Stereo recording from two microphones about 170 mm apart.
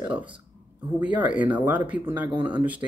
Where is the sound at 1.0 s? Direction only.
10° right (ahead or behind).